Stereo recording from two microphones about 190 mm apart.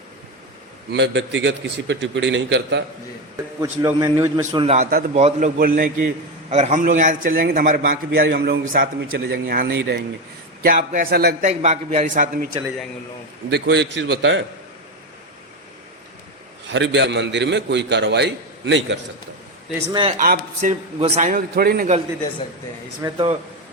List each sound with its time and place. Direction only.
0.9 s a man's voice: 65° right (ahead or behind)
3.6 s a man's voice: 20° right (ahead or behind)
4.6 s a man's voice: 35° right (ahead or behind)
5.5 s a man's voice: 50° right (ahead or behind)
10.6 s a man's voice: 45° right (ahead or behind)
11.4 s a man's voice: 40° right (ahead or behind)
13.5 s a man's voice: 65° right (ahead or behind)
16.7 s a man's voice: 70° right (ahead or behind)
19.9 s a man's voice: 25° right (ahead or behind)
20.1 s a man's voice: 45° right (ahead or behind)
23.0 s a man's voice: 30° right (ahead or behind)